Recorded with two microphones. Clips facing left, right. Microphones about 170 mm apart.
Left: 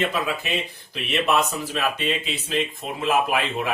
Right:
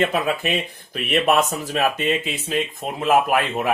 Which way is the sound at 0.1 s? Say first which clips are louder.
Right 4 dB; 55° right (ahead or behind).